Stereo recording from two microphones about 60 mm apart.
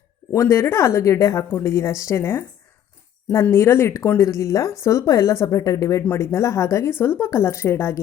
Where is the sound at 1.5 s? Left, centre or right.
Left.